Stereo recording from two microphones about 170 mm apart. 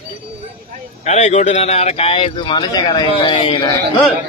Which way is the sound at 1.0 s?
40° left (ahead or behind).